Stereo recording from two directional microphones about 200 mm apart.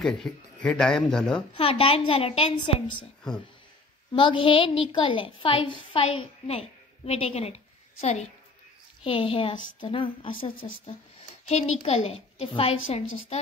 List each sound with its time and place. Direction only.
0.0 s speech: centre (ahead or behind)
1.6 s a woman's voice: 25° left (ahead or behind)
4.1 s a woman's voice: 25° left (ahead or behind)